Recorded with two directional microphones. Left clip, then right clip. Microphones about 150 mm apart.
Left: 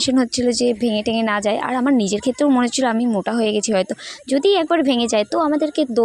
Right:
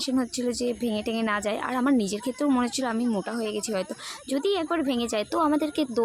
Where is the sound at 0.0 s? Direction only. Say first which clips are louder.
Left 9 dB; 45° left (ahead or behind).